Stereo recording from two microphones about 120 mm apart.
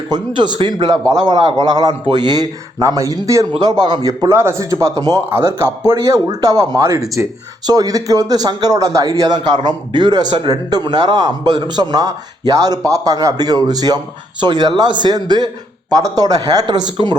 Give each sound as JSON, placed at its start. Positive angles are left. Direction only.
{"t": 0.1, "sound": "speech", "side_deg": -35}